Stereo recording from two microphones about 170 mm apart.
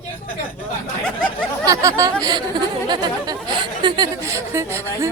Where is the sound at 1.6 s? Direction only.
20° right (ahead or behind).